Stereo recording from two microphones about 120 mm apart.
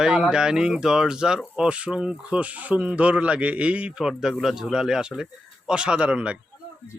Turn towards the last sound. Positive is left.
turn(degrees=-10)  # may be behind; listen again after turning